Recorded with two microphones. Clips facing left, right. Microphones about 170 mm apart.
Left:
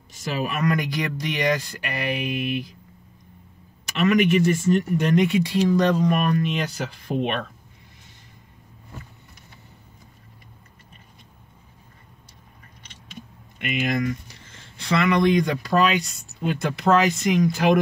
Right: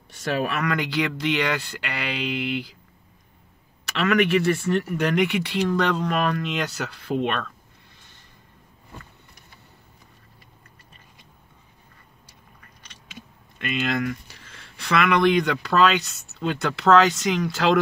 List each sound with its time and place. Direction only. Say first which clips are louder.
0.1 s speech: right 2 dB; 65° right (ahead or behind)
4.0 s speech: left 2 dB; 65° right (ahead or behind)
13.8 s speech: left 2 dB; 70° right (ahead or behind)